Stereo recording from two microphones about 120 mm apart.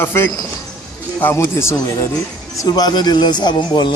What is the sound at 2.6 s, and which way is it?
Speech, 35° left (ahead or behind).